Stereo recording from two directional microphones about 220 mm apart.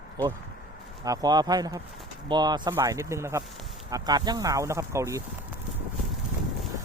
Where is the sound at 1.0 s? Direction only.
15° right (ahead or behind).